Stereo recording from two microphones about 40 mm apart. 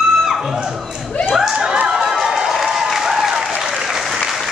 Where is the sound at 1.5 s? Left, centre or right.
Right.